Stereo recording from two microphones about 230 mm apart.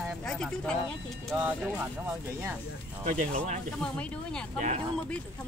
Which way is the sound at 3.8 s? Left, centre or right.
Centre.